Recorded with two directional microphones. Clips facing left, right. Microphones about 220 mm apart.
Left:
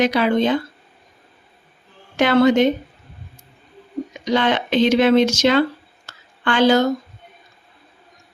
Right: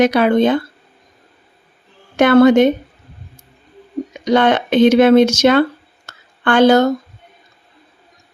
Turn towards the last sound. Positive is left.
turn(degrees=-55)  # may be behind; listen again after turning